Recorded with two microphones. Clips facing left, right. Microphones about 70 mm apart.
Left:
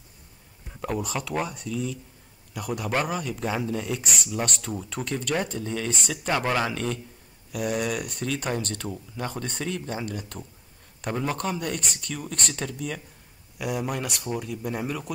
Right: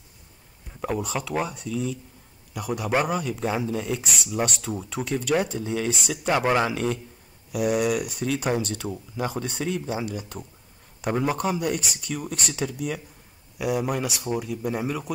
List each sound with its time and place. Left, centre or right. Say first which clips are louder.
0.7 s speech: right 2 dB; centre
6.3 s speech: right 3 dB; centre